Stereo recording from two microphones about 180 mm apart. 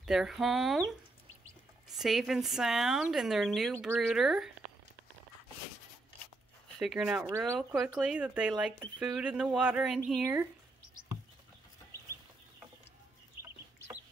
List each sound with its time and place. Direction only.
0.0 s a woman's voice: centre (ahead or behind)
2.0 s a woman's voice: centre (ahead or behind)
6.8 s a woman's voice: 5° right (ahead or behind)
7.2 s speech: 15° right (ahead or behind)
7.5 s a woman's voice: 5° right (ahead or behind)